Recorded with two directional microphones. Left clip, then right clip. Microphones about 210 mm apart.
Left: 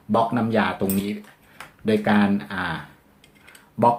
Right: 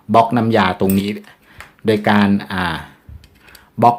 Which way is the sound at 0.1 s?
55° right (ahead or behind).